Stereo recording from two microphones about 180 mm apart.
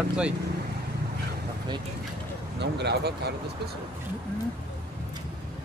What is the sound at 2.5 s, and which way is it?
Speech, 70° right (ahead or behind).